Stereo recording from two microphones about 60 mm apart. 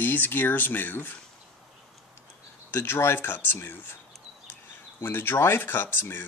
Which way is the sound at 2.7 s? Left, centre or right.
Left.